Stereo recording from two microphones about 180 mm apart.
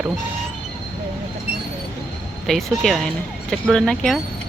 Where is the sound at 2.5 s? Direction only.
Centre (ahead or behind).